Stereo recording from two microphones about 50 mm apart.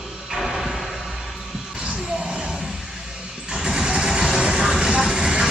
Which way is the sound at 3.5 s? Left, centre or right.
Centre.